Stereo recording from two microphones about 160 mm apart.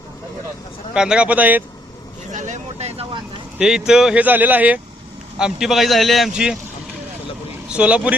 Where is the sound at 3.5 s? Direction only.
5° right (ahead or behind).